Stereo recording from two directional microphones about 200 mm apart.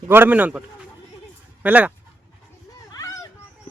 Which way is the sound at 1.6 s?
10° right (ahead or behind).